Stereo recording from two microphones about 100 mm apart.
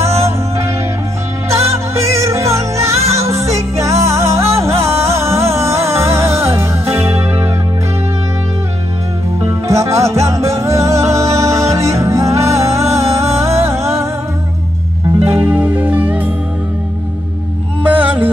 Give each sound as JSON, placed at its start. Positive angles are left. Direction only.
{"t": 1.5, "sound": "music", "side_deg": -30}
{"t": 9.5, "sound": "music", "side_deg": -30}
{"t": 15.2, "sound": "music", "side_deg": -20}
{"t": 17.8, "sound": "music", "side_deg": -15}